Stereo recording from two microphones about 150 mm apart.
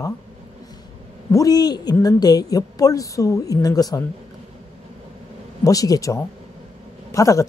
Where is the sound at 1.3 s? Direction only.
25° left (ahead or behind).